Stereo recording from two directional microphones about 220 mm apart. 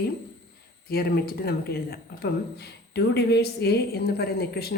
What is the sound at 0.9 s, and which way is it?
A woman's voice, 45° left (ahead or behind).